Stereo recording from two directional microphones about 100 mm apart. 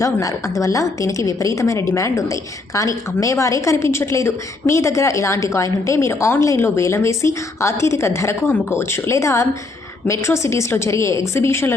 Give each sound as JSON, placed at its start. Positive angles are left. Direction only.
{"t": 0.0, "sound": "a woman's voice", "side_deg": 35}